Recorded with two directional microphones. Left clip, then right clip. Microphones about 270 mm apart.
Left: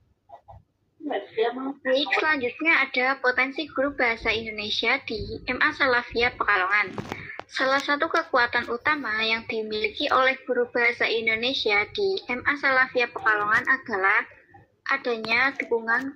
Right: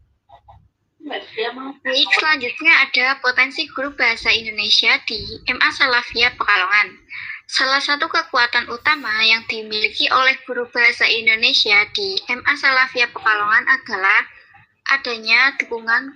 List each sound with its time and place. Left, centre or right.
1.0 s a woman's voice: centre